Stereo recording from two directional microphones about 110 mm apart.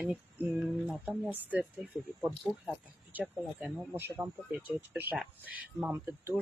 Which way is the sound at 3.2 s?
10° right (ahead or behind).